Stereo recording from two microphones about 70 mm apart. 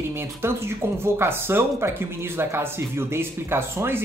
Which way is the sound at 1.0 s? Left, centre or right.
Right.